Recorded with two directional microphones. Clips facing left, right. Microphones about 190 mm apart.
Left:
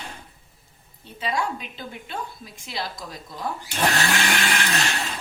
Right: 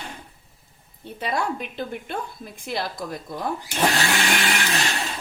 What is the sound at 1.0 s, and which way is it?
A woman's voice, 55° right (ahead or behind).